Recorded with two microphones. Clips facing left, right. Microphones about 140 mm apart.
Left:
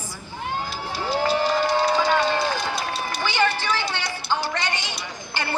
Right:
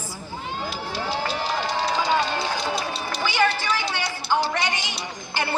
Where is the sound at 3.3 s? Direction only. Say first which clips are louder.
Right 1 dB; 10° right (ahead or behind).